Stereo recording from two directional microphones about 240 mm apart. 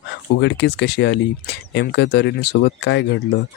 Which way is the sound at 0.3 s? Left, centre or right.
Left.